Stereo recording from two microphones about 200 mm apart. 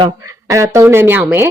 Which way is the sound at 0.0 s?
15° right (ahead or behind).